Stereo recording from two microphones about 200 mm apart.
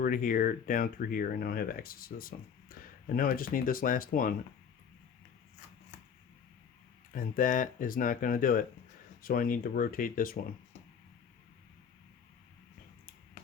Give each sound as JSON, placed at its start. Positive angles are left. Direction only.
{"t": 0.0, "sound": "speech", "side_deg": 45}
{"t": 7.1, "sound": "speech", "side_deg": 45}